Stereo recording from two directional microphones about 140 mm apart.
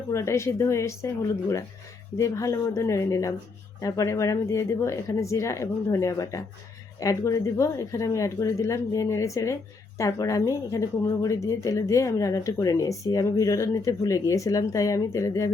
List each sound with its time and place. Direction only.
0.1 s speech: 20° left (ahead or behind)